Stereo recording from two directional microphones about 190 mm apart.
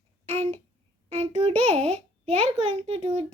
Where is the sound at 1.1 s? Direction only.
30° right (ahead or behind).